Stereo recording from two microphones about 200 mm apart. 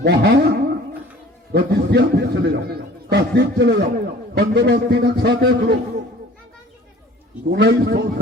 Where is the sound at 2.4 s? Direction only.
55° right (ahead or behind).